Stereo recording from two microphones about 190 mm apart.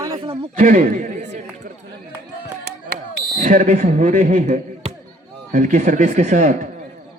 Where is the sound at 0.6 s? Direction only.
45° right (ahead or behind).